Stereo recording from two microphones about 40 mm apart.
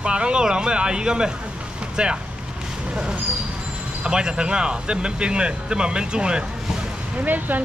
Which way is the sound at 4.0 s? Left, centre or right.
Right.